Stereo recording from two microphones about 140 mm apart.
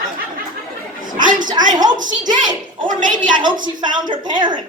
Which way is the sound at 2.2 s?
30° right (ahead or behind).